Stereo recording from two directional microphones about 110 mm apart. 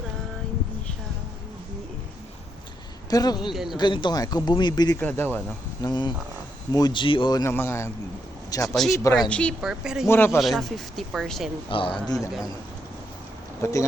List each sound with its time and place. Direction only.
3.1 s speech: 35° left (ahead or behind)
3.5 s speech: 5° right (ahead or behind)
3.8 s speech: 45° left (ahead or behind)
4.9 s speech: 20° left (ahead or behind)
5.8 s speech: 40° left (ahead or behind)
7.4 s a man's voice: 25° left (ahead or behind)
9.3 s speech: 10° left (ahead or behind)
9.6 s speech: 5° right (ahead or behind)
10.1 s a man's voice: 20° left (ahead or behind)
10.4 s speech: centre (ahead or behind)
11.7 s speech: 50° left (ahead or behind)
13.6 s a man's voice: 30° left (ahead or behind)